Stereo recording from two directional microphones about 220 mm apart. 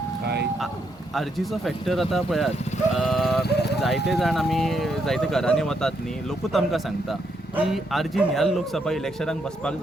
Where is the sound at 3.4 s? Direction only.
50° left (ahead or behind).